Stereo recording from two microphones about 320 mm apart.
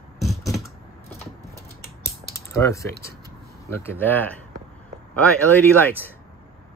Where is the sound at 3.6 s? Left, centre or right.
Centre.